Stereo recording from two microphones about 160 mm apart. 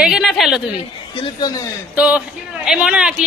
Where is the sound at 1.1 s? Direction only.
35° left (ahead or behind).